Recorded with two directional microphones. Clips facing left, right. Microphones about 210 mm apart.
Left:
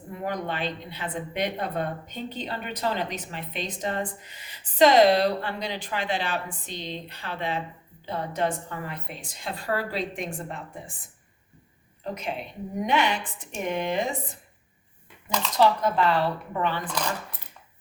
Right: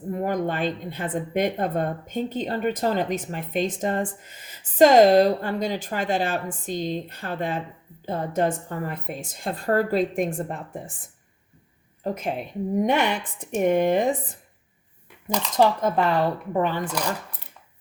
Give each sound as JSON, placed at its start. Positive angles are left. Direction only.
{"t": 0.1, "sound": "a woman's voice", "side_deg": -45}
{"t": 12.0, "sound": "a woman's voice", "side_deg": -50}
{"t": 15.5, "sound": "a woman's voice", "side_deg": -50}